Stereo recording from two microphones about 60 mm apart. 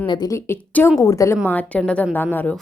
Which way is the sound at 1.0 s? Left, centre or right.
Left.